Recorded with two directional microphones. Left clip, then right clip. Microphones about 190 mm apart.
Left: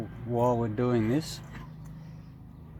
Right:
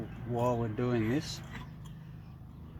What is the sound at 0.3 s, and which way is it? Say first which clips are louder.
Speech: left 5 dB; 45° left (ahead or behind).